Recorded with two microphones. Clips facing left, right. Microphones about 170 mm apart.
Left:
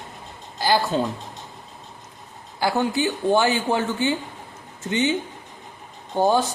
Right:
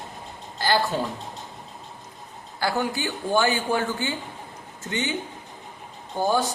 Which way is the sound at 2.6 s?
20° left (ahead or behind).